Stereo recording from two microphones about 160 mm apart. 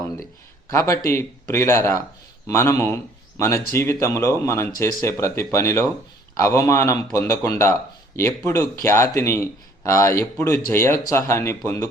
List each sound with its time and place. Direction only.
0.7 s speech: 20° left (ahead or behind)